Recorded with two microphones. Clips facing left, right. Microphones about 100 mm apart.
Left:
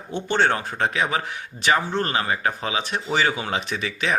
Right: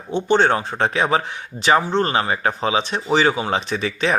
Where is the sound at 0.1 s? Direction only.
20° right (ahead or behind).